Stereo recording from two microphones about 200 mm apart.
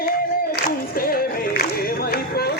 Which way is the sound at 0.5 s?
50° left (ahead or behind).